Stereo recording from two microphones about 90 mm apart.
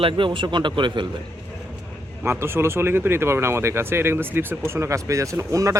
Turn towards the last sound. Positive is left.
turn(degrees=-35)  # may be behind; listen again after turning